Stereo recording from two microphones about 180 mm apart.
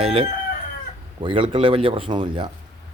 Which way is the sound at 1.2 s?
30° right (ahead or behind).